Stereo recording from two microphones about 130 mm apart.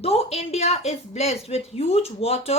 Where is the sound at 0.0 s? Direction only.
50° left (ahead or behind).